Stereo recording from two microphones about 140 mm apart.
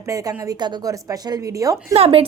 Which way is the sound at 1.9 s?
45° right (ahead or behind).